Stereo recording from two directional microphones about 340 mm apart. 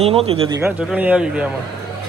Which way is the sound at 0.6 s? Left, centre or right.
Centre.